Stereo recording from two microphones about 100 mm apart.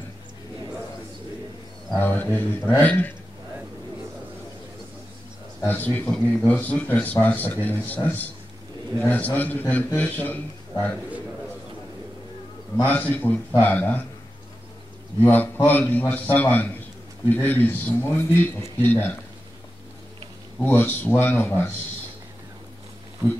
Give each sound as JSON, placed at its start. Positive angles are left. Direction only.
{"t": 2.0, "sound": "speech", "side_deg": 20}
{"t": 5.7, "sound": "a man's voice", "side_deg": 20}
{"t": 12.8, "sound": "a man's voice", "side_deg": 15}
{"t": 15.1, "sound": "a man's voice", "side_deg": 20}
{"t": 20.5, "sound": "speech", "side_deg": 20}